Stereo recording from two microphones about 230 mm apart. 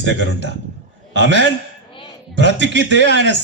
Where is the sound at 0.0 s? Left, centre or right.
Right.